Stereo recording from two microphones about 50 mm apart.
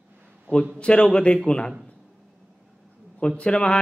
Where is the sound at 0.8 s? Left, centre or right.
Left.